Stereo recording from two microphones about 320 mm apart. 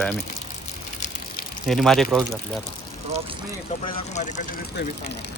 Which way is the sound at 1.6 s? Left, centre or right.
Centre.